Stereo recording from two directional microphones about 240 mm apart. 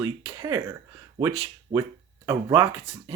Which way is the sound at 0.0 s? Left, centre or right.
Centre.